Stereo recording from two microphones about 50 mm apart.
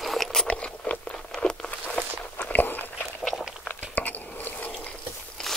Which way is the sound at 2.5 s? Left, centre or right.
Left.